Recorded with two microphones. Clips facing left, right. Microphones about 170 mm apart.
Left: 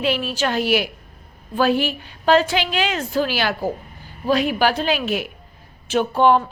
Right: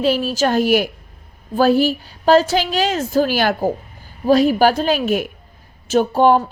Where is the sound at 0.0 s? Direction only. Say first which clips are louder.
Right 5 dB; 40° right (ahead or behind).